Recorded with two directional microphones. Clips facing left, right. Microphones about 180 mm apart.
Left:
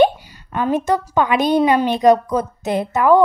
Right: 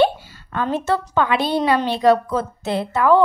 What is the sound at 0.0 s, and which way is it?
A woman's voice, 15° left (ahead or behind).